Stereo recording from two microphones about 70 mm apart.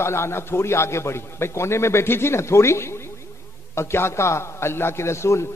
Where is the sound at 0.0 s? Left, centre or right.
Left.